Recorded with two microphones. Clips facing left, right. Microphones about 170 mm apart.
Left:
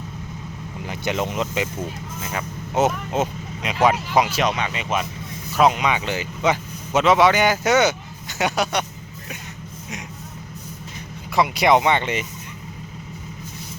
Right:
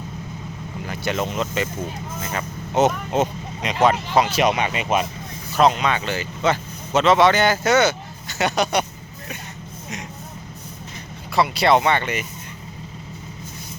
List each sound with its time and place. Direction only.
0.9 s speech: 15° left (ahead or behind)
4.4 s speech: 10° right (ahead or behind)
5.5 s speech: 10° left (ahead or behind)
11.3 s speech: 15° left (ahead or behind)